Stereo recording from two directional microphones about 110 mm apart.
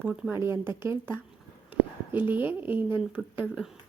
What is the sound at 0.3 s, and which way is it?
Speech, 20° right (ahead or behind).